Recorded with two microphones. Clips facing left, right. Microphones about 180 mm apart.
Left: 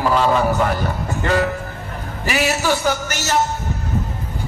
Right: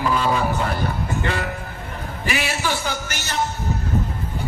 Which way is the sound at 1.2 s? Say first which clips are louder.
Left 9 dB; 40° left (ahead or behind).